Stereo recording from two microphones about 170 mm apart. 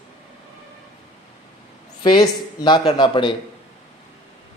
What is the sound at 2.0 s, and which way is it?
Speech, 25° left (ahead or behind).